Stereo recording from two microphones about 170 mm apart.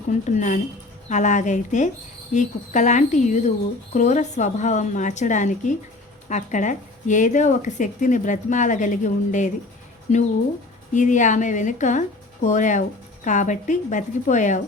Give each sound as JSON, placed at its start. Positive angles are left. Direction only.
{"t": 0.1, "sound": "speech", "side_deg": 45}